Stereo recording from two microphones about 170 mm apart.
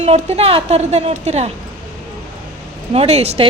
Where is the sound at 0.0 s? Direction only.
40° right (ahead or behind).